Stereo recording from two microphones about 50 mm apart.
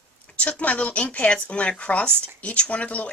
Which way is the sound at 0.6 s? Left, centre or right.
Left.